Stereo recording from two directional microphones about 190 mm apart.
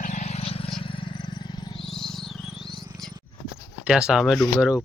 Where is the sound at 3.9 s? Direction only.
5° right (ahead or behind).